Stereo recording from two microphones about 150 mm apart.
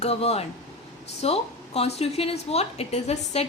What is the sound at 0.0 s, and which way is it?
A woman's voice, 45° left (ahead or behind).